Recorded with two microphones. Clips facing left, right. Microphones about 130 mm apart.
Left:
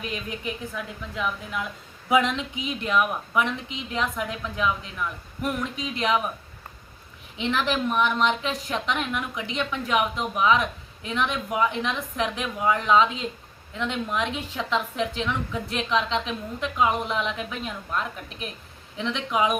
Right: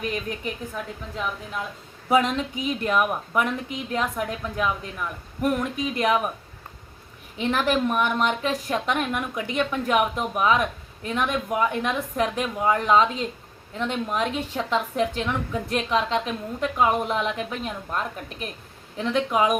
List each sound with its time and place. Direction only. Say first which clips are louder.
0.0 s a woman's voice: right 3 dB; 45° right (ahead or behind)
7.3 s a woman's voice: right 3 dB; 45° right (ahead or behind)